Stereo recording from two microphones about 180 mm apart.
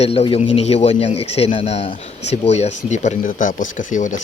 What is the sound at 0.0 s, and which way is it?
Speech, 35° left (ahead or behind).